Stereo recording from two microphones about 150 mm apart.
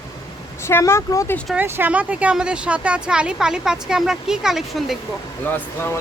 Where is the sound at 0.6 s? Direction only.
15° left (ahead or behind).